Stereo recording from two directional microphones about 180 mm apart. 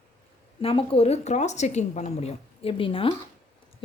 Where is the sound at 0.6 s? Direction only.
30° left (ahead or behind).